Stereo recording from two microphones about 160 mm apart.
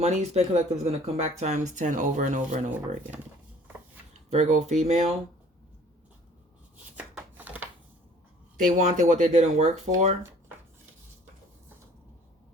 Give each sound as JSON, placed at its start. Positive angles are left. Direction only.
{"t": 0.0, "sound": "speech", "side_deg": -45}
{"t": 4.3, "sound": "speech", "side_deg": -45}
{"t": 6.9, "sound": "a sound", "side_deg": -10}
{"t": 8.5, "sound": "speech", "side_deg": -50}